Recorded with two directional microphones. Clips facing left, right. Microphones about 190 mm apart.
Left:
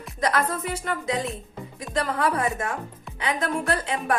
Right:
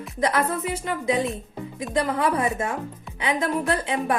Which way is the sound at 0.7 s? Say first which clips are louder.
Right 3 dB; 25° right (ahead or behind).